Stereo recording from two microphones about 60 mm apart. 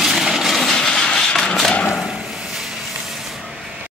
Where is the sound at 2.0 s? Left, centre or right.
Centre.